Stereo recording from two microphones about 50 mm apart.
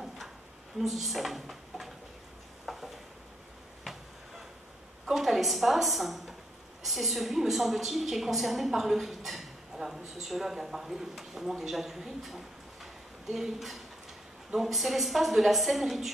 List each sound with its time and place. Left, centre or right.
0.7 s speech: centre
2.6 s stir: centre
5.0 s a woman's voice: centre